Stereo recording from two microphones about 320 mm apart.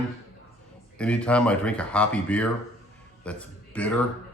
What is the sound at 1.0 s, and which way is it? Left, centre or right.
Speech, centre.